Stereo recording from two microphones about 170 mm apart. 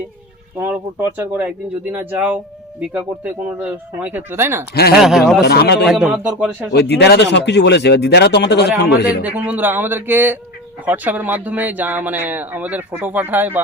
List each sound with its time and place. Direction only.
0.6 s speech: 10° right (ahead or behind)
4.7 s speech: 70° left (ahead or behind)
4.9 s speech: centre (ahead or behind)
5.5 s speech: 75° left (ahead or behind)
5.9 s speech: 5° right (ahead or behind)
6.7 s speech: 85° left
9.2 s speech: 10° right (ahead or behind)